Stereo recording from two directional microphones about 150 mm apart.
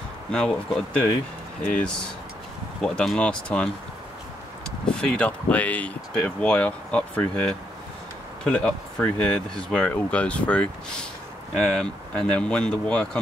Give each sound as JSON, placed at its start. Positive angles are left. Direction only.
{"t": 0.3, "sound": "speech", "side_deg": 5}
{"t": 4.9, "sound": "speech", "side_deg": 5}